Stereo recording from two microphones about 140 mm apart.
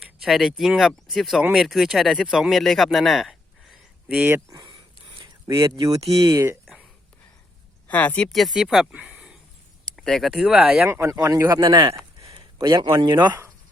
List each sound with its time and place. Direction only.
0.0 s speech: centre (ahead or behind)
1.4 s speech: 10° right (ahead or behind)
4.2 s speech: 15° right (ahead or behind)
4.5 s a sound: 35° right (ahead or behind)
5.5 s speech: 20° right (ahead or behind)
7.9 s speech: 10° left (ahead or behind)
10.8 s speech: 20° right (ahead or behind)
11.6 s a sound: 35° right (ahead or behind)
12.6 s speech: 30° right (ahead or behind)